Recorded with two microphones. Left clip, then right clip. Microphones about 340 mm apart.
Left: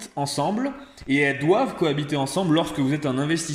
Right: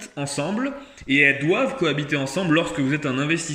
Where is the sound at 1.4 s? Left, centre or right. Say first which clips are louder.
Left 1 dB; left.